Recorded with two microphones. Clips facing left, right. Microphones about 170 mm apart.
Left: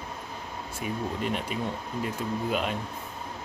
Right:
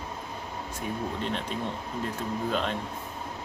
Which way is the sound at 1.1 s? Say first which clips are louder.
Left 1 dB; 10° left (ahead or behind).